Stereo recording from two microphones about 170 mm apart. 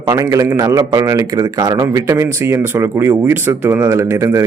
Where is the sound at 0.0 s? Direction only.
20° right (ahead or behind).